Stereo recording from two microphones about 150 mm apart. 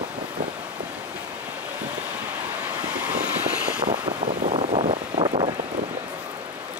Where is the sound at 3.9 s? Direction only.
50° right (ahead or behind).